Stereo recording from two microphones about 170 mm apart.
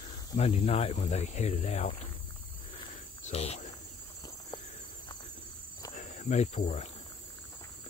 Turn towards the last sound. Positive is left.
turn(degrees=40)  # may be behind; listen again after turning